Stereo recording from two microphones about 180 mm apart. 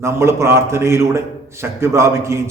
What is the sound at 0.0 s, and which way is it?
A man's voice, 15° right (ahead or behind).